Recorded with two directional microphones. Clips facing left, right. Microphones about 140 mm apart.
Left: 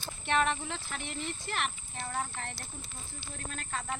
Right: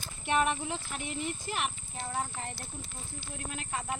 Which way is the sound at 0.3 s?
10° right (ahead or behind).